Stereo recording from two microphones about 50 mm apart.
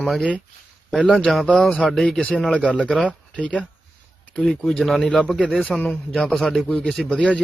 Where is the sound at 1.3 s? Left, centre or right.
Centre; by 3.7 s left.